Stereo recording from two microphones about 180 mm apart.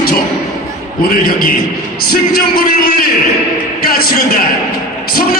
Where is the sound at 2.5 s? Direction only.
55° left (ahead or behind).